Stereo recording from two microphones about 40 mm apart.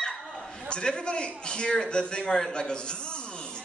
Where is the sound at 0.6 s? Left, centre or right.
Left.